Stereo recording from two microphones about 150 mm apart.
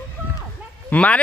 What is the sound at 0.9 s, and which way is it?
Speech, 10° left (ahead or behind).